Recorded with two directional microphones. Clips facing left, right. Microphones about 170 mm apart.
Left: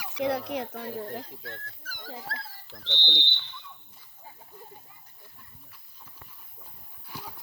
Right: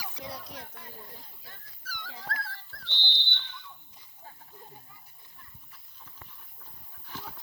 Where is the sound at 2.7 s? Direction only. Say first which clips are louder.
Left 4 dB; 90° left.